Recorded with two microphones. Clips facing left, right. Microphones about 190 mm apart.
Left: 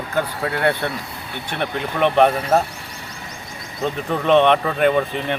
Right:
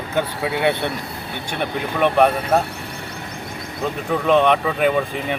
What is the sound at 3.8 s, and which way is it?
Speech, centre (ahead or behind).